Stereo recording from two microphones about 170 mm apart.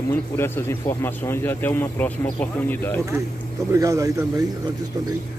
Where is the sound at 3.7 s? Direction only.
20° right (ahead or behind).